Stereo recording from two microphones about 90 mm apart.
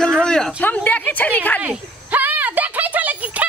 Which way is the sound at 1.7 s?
20° right (ahead or behind).